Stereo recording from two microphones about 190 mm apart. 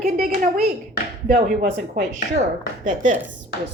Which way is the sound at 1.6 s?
40° right (ahead or behind).